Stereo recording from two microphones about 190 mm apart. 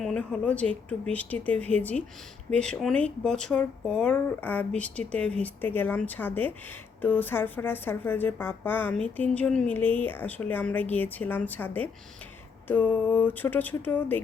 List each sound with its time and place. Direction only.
0.0 s speech: 5° left (ahead or behind)